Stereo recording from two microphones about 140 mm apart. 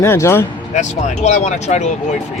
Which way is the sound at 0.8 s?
55° left (ahead or behind).